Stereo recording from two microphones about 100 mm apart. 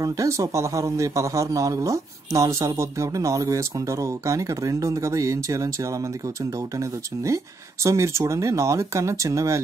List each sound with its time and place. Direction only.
0.0 s speech: 35° right (ahead or behind)
7.8 s speech: 30° right (ahead or behind)